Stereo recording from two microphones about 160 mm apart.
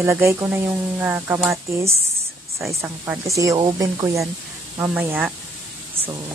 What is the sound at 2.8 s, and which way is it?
Speech, 15° right (ahead or behind).